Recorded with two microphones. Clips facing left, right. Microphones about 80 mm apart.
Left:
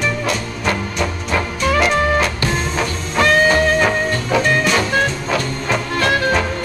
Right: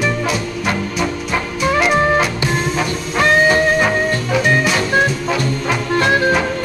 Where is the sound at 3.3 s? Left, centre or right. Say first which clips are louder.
Right 1 dB; centre.